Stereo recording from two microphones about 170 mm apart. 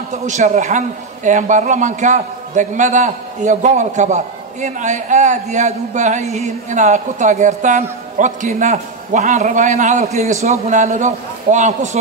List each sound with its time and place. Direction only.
0.3 s a man's voice: 45° right (ahead or behind)